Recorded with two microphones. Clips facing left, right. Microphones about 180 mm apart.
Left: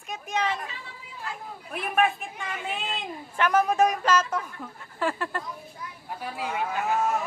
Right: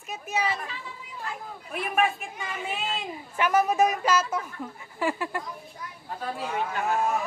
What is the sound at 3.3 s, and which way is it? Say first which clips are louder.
A man's voice: even; 10° right (ahead or behind).